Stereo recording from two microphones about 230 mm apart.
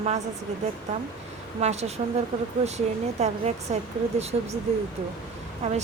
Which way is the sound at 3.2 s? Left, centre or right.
Right.